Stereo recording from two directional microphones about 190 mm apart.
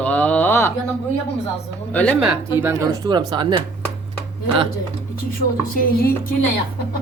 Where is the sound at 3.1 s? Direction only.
20° right (ahead or behind).